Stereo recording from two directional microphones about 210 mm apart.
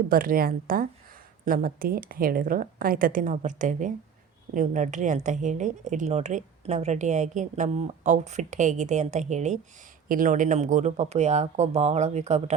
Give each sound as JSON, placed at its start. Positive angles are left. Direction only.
{"t": 0.1, "sound": "a woman's voice", "side_deg": -45}